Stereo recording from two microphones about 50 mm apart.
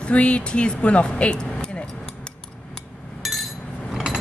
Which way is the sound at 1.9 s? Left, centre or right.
Centre.